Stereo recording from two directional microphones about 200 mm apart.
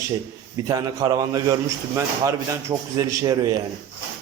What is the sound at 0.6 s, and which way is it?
A man's voice, 20° right (ahead or behind).